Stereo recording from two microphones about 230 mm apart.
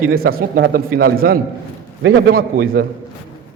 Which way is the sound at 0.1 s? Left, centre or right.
Right.